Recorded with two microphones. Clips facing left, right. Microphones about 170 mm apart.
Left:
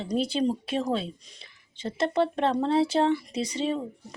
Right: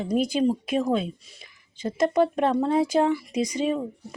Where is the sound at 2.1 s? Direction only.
10° right (ahead or behind).